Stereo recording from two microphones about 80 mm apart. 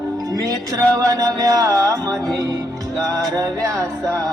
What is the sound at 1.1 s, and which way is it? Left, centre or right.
Music, right.